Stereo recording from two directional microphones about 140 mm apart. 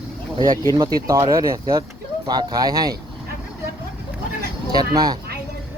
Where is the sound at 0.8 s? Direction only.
25° right (ahead or behind).